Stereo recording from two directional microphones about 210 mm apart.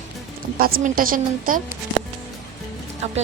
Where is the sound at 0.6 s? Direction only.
40° right (ahead or behind).